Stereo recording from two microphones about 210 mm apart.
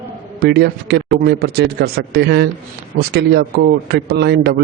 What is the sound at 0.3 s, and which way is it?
Speech, 50° right (ahead or behind).